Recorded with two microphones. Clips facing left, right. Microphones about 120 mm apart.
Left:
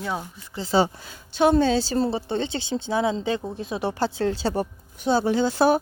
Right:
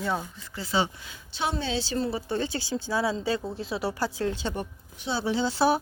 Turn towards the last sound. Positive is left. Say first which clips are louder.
# left 4 dB
turn(degrees=50)  # may be behind; listen again after turning